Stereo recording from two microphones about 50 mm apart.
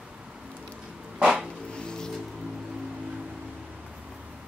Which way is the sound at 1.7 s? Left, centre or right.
Centre.